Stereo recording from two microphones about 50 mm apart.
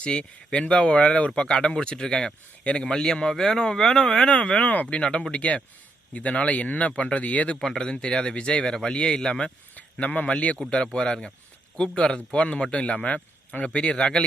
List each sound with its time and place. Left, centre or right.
0.0 s speech: left
7.6 s speech: centre
9.7 s a sound: left
10.3 s speech: left
10.9 s speech: centre